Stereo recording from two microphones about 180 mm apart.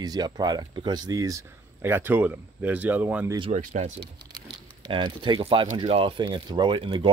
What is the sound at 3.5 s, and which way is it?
Speech, 40° right (ahead or behind).